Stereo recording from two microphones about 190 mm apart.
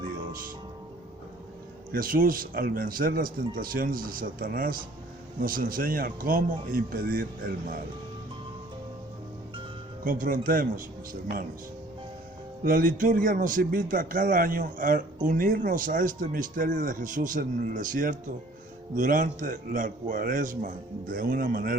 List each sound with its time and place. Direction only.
0.0 s music: 45° right (ahead or behind)
1.9 s a man's voice: 50° right (ahead or behind)
10.0 s a man's voice: 45° right (ahead or behind)
12.6 s a man's voice: 45° right (ahead or behind)